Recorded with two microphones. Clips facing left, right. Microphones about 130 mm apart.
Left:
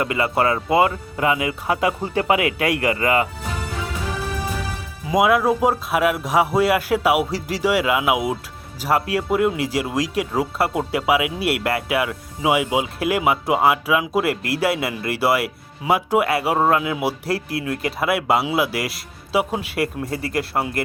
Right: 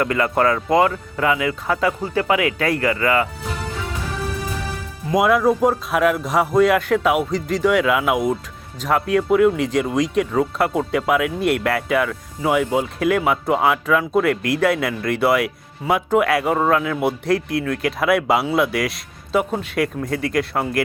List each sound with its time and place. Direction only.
0.0 s speech: 10° left (ahead or behind)
5.0 s speech: centre (ahead or behind)